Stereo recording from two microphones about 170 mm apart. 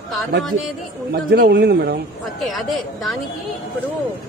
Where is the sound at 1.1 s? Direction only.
65° right (ahead or behind).